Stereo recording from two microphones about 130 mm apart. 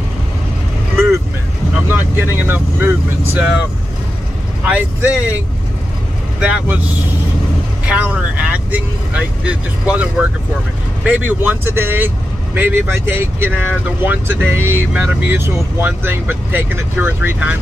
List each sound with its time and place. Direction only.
0.9 s vehicle: 20° right (ahead or behind)
1.8 s speech: 15° right (ahead or behind)
4.6 s speech: 10° right (ahead or behind)
6.4 s speech: 10° right (ahead or behind)
7.8 s speech: 10° right (ahead or behind)
11.1 s speech: 10° right (ahead or behind)